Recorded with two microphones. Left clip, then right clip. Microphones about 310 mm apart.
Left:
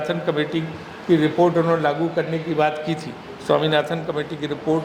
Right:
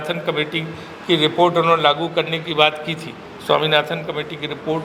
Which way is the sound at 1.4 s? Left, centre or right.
Right.